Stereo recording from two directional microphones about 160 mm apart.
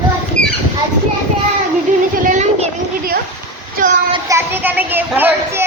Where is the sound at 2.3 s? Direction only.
45° right (ahead or behind).